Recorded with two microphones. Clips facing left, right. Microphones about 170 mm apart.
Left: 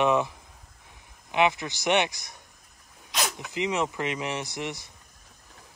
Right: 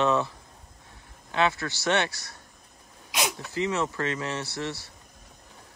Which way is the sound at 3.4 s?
15° left (ahead or behind).